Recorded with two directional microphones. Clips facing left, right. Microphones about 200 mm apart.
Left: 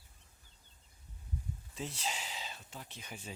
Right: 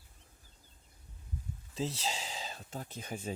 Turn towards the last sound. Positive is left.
turn(degrees=-45)  # may be behind; listen again after turning